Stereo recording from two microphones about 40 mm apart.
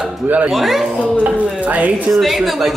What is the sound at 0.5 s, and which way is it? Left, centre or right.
Speech, centre.